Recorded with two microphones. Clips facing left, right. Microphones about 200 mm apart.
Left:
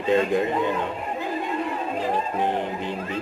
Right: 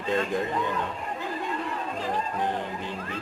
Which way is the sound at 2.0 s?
25° left (ahead or behind).